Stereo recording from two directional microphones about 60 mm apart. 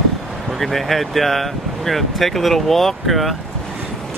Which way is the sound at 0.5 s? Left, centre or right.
Centre.